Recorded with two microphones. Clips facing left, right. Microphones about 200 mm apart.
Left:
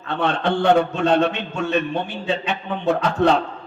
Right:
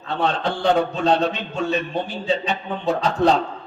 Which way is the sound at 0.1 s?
60° left (ahead or behind).